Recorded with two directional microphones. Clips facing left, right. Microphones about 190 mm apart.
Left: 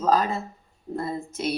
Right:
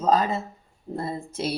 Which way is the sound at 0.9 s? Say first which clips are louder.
Left 1 dB; 30° right (ahead or behind).